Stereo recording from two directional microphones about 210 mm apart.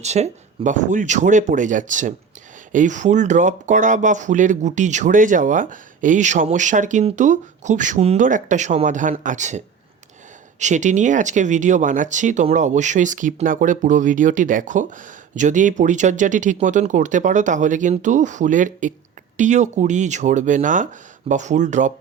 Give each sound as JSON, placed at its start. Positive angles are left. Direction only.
{"t": 0.0, "sound": "speech", "side_deg": -30}